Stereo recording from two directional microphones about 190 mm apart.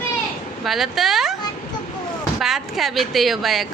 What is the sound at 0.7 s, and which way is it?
Speech, centre (ahead or behind).